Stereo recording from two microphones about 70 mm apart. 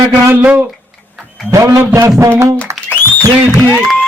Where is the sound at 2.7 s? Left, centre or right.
Right.